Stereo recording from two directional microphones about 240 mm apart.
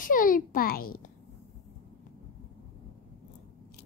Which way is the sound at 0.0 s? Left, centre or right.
Left.